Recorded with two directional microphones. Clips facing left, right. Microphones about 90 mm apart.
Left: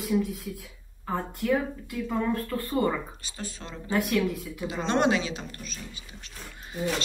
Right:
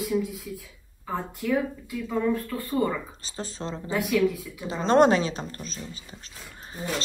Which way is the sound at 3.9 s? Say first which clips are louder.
Left 1 dB; centre (ahead or behind).